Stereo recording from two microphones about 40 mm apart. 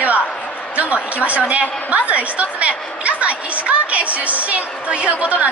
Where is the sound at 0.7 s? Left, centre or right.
Right.